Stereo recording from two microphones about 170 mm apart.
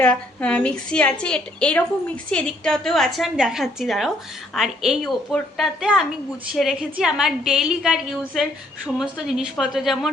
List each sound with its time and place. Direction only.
0.0 s a woman's voice: 5° left (ahead or behind)